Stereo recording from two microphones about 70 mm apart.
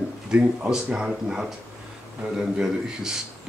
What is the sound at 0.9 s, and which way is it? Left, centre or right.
Speech, centre.